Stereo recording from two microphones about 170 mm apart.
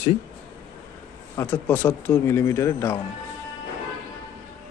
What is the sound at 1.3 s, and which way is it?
Speech, 15° left (ahead or behind).